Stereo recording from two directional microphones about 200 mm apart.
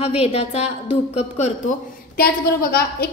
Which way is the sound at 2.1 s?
50° left (ahead or behind).